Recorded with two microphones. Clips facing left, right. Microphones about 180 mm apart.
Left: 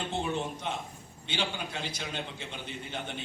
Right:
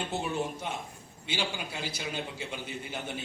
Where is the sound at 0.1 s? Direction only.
10° right (ahead or behind).